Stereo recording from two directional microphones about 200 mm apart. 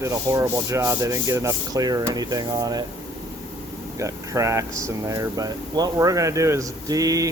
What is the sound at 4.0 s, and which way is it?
Speech, 15° right (ahead or behind).